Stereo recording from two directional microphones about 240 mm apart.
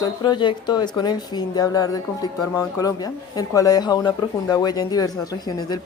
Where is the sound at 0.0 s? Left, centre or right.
Centre.